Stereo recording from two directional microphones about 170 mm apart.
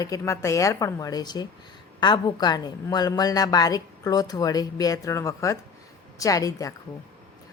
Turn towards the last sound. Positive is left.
turn(degrees=20)  # may be behind; listen again after turning